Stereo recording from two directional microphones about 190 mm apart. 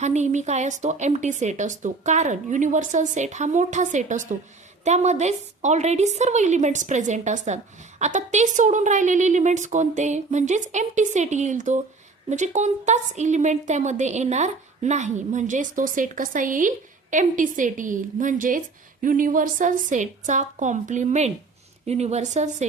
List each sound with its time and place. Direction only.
0.0 s a woman's voice: 40° right (ahead or behind)